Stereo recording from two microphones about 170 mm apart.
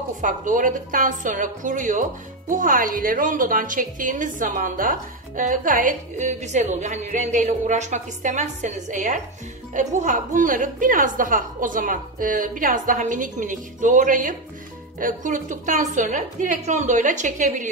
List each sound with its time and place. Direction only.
0.2 s a woman's voice: 50° right (ahead or behind)